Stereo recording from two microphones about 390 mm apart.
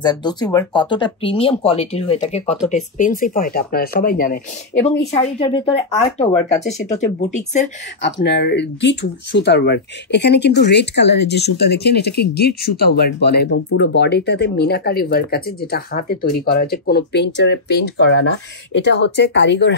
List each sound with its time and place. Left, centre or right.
0.0 s speech: centre; by 19.7 s left